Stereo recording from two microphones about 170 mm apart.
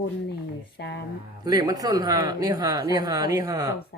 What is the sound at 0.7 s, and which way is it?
Speech, 80° left.